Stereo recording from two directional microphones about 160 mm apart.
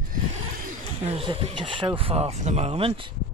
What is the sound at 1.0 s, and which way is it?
Speech, 35° right (ahead or behind).